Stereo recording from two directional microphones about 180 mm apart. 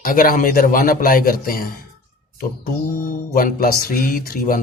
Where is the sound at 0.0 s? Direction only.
50° left (ahead or behind).